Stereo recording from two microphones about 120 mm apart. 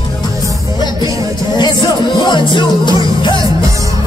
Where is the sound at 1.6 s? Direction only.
35° left (ahead or behind).